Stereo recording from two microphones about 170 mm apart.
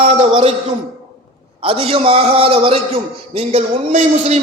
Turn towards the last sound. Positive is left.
turn(degrees=-40)  # may be behind; listen again after turning